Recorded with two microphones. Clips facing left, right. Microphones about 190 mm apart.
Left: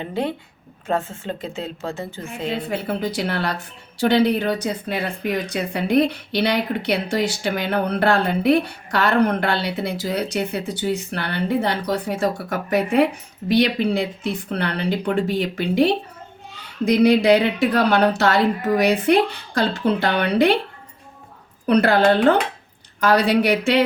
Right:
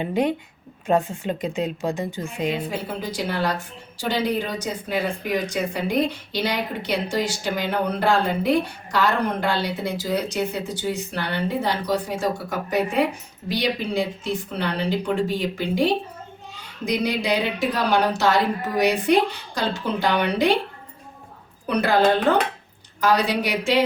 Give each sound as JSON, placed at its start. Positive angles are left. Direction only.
{"t": 0.0, "sound": "speech", "side_deg": -15}
{"t": 2.6, "sound": "speech", "side_deg": 60}
{"t": 21.7, "sound": "speech", "side_deg": 60}
{"t": 23.0, "sound": "speech", "side_deg": 60}